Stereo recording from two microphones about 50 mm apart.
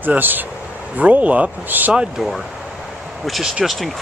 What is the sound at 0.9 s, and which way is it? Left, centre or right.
Speech, right.